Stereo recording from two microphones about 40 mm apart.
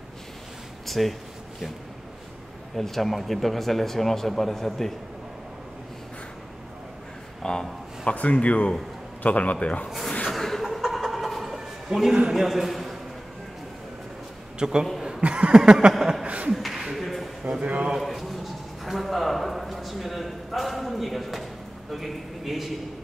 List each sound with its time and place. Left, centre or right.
0.8 s speech: centre
2.7 s speech: centre
7.4 s speech: centre
8.0 s a man's voice: left
10.3 s a sound: centre
10.6 s a sound: centre
11.5 s bow-wow: centre
12.4 s a man's voice: centre
14.6 s a man's voice: centre
15.0 s a sound: right
16.0 s chuckle: centre
16.5 s a sound: centre
17.4 s speech: right
18.0 s a man's voice: centre